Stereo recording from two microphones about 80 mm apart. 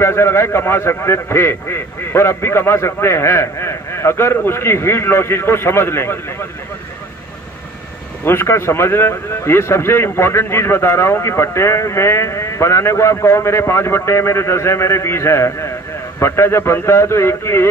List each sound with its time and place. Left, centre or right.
0.0 s speech: left
8.2 s speech: left